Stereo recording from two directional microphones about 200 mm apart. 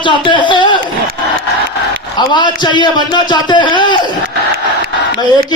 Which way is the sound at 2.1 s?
20° left (ahead or behind).